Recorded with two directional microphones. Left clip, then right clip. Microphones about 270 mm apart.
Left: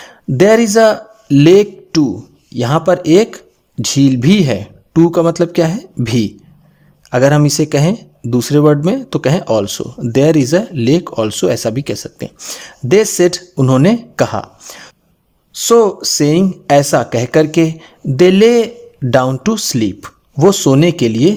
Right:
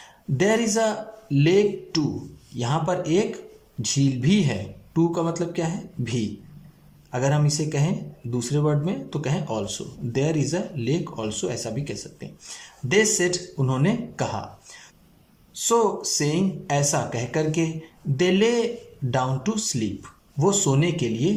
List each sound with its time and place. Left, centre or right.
0.0 s speech: left